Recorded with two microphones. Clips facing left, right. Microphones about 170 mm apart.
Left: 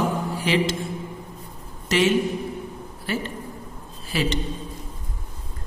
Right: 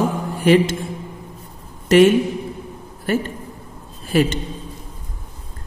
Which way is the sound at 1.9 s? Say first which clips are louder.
Right 8 dB; 55° right (ahead or behind).